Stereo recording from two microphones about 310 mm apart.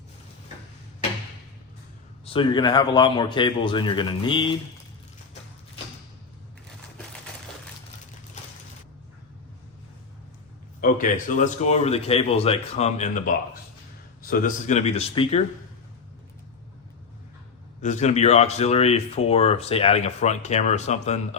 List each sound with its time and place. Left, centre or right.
2.2 s a man's voice: centre
10.8 s speech: left
17.7 s speech: left